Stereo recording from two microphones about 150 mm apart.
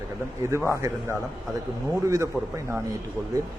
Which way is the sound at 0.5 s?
20° right (ahead or behind).